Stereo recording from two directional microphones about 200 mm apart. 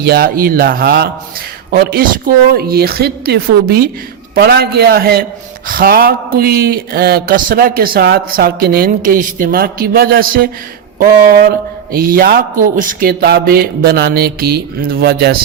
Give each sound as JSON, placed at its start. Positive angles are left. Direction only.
{"t": 0.0, "sound": "a man's voice", "side_deg": -50}